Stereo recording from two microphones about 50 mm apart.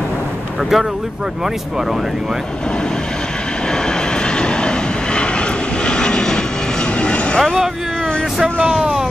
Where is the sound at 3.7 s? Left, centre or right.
Centre.